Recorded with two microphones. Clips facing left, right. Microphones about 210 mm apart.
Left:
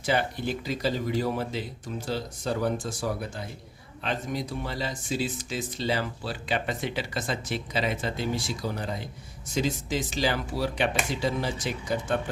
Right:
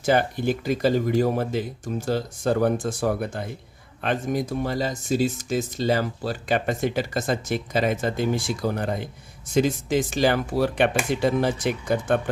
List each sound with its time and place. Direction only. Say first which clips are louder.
0.0 s speech: right 6 dB; 50° right (ahead or behind)